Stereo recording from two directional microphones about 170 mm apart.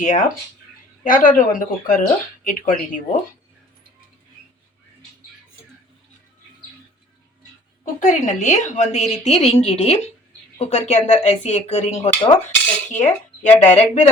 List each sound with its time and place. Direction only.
0.0 s speech: 50° left (ahead or behind)
7.9 s speech: 45° left (ahead or behind)